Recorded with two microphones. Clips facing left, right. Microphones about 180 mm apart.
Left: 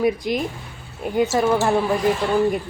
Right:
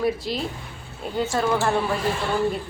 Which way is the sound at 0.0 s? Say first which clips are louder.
Left 4 dB; 15° left (ahead or behind).